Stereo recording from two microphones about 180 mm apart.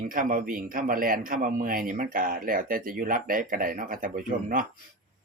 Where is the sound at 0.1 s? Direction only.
50° right (ahead or behind).